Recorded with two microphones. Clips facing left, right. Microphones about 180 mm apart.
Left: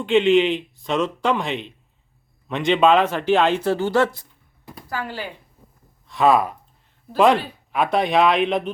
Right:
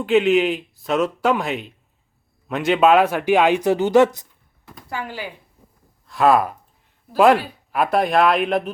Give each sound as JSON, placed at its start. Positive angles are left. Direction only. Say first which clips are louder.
{"t": 0.0, "sound": "speech", "louder": "even", "side_deg": -5}
{"t": 6.1, "sound": "speech", "louder": "right 1 dB", "side_deg": 0}